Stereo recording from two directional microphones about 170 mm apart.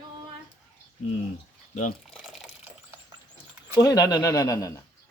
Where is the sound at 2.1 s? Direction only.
Centre (ahead or behind).